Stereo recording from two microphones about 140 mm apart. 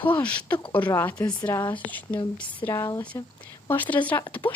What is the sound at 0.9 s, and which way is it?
Speech, 15° left (ahead or behind).